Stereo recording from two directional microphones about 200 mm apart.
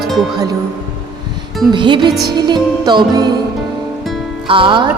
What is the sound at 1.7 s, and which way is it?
Music, 25° right (ahead or behind).